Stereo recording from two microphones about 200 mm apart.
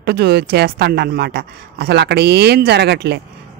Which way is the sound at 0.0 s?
55° right (ahead or behind).